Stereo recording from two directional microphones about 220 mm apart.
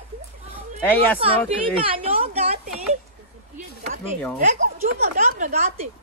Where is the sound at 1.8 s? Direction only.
25° right (ahead or behind).